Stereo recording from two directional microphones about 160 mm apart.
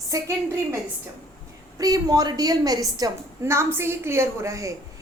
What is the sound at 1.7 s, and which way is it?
A woman's voice, 25° right (ahead or behind).